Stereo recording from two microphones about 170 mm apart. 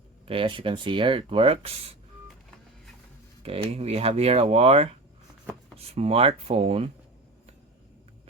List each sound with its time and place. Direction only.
0.3 s speech: 30° right (ahead or behind)
3.4 s speech: 35° right (ahead or behind)